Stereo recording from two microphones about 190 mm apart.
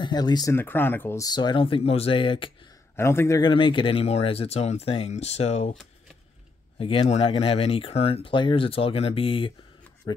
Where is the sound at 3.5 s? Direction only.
25° left (ahead or behind).